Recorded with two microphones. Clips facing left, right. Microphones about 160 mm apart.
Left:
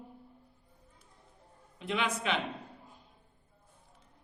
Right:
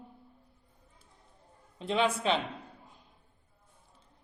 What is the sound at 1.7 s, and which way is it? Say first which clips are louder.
Speech: right 5 dB; 30° right (ahead or behind).